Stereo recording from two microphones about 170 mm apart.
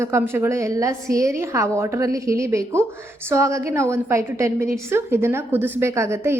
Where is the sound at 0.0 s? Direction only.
15° right (ahead or behind).